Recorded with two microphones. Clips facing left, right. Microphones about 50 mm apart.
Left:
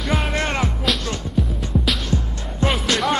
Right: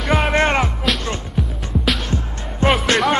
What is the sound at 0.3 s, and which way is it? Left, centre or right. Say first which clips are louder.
Music: right 6 dB; right.